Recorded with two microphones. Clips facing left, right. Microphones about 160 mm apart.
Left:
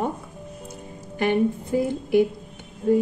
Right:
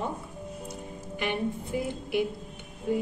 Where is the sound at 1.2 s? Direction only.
45° left (ahead or behind).